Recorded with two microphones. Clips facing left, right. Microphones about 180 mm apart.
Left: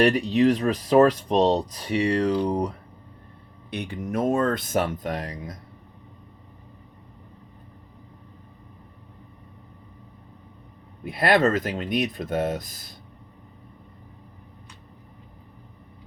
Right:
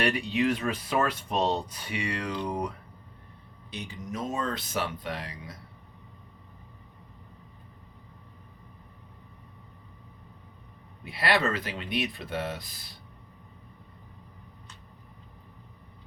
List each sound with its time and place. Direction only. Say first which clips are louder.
0.0 s speech: left 8 dB; 40° left (ahead or behind)
3.7 s speech: left 8 dB; 60° left (ahead or behind)
11.0 s speech: left 7 dB; 50° left (ahead or behind)